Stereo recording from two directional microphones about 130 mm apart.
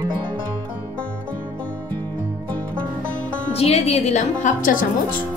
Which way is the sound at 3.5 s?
50° left (ahead or behind).